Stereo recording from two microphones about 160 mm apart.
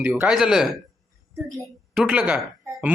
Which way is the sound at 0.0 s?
5° right (ahead or behind).